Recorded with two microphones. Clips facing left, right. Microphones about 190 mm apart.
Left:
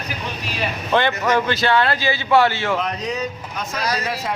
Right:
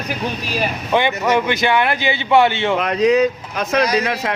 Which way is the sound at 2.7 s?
70° right (ahead or behind).